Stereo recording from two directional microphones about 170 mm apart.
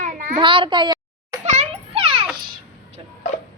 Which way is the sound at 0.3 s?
30° right (ahead or behind).